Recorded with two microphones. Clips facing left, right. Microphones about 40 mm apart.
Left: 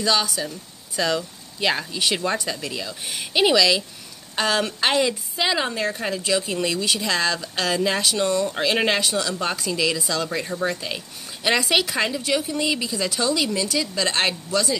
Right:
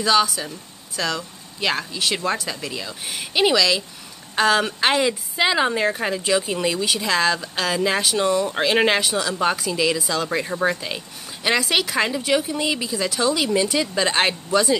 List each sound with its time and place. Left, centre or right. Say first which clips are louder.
0.0 s speech: right 3 dB; centre
13.5 s speech: right 4 dB; right
14.0 s speech: right 3 dB; centre